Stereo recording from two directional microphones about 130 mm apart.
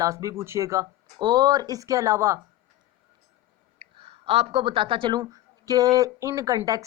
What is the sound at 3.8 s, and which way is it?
Speech, 45° right (ahead or behind).